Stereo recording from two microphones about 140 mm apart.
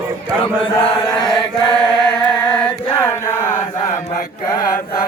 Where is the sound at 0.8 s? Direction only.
35° left (ahead or behind).